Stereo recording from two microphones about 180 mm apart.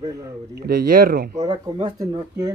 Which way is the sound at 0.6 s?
60° right (ahead or behind).